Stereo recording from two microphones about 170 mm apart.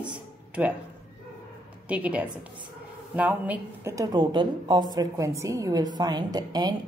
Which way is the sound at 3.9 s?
25° right (ahead or behind).